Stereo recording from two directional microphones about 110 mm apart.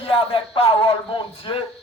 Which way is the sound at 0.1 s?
55° left (ahead or behind).